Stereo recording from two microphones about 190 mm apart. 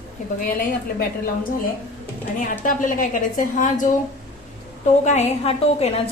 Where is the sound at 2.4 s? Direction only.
45° left (ahead or behind).